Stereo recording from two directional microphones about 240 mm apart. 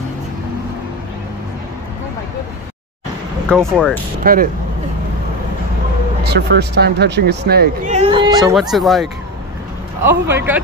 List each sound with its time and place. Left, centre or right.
3.4 s speech: centre
4.2 s speech: right
6.2 s speech: right
7.9 s speech: right
8.5 s speech: centre